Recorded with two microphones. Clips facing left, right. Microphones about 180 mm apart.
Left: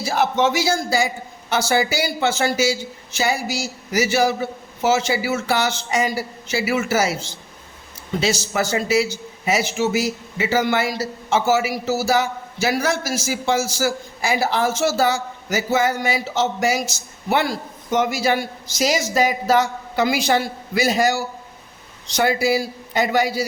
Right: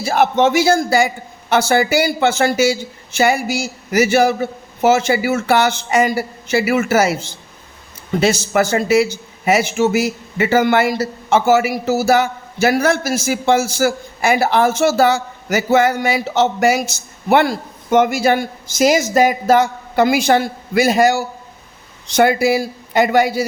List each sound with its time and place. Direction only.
0.0 s a man's voice: 60° right (ahead or behind)